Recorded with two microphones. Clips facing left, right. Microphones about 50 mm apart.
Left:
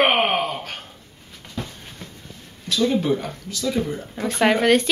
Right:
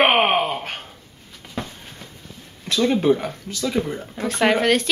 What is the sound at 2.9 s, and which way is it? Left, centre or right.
Speech, right.